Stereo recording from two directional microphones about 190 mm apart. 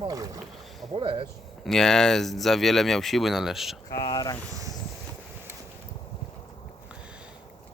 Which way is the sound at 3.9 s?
20° left (ahead or behind).